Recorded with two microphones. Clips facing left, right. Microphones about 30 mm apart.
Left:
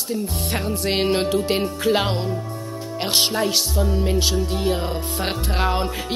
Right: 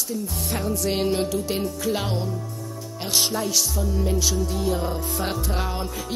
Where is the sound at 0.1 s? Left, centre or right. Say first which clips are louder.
Left 5 dB; left.